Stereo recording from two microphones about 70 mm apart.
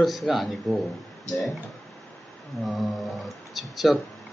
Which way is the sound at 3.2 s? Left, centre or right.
Centre.